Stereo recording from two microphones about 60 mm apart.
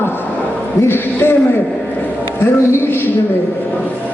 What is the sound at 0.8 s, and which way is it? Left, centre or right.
Speech, left.